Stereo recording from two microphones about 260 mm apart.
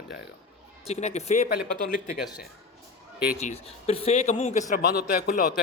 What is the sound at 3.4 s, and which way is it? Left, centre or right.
A man's voice, left.